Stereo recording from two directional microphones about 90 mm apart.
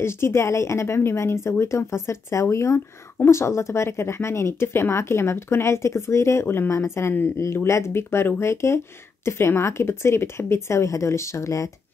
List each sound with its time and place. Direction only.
0.0 s a woman's voice: 30° left (ahead or behind)